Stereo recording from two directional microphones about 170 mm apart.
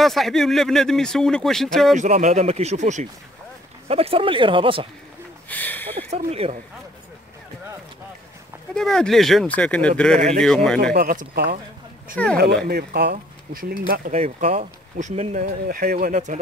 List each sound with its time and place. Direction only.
0.0 s speech: centre (ahead or behind)
2.0 s speech: 45° right (ahead or behind)
5.5 s speech: 10° left (ahead or behind)
5.9 s speech: 35° right (ahead or behind)
8.7 s speech: 5° left (ahead or behind)
10.8 s speech: 65° right (ahead or behind)
12.2 s speech: 10° left (ahead or behind)
12.6 s speech: 70° right (ahead or behind)
14.1 s speech: 40° right (ahead or behind)
15.7 s speech: 60° right (ahead or behind)